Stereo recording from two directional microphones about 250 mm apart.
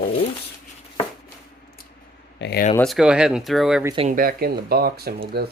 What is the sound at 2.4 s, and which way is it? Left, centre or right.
Speech, left.